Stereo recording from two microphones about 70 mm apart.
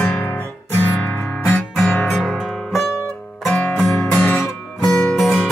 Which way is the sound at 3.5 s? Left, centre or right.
Centre.